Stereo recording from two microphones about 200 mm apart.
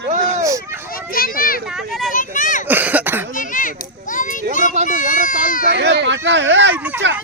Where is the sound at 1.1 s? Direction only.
45° left (ahead or behind).